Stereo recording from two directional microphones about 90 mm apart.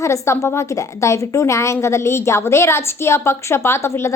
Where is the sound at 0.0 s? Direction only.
35° left (ahead or behind).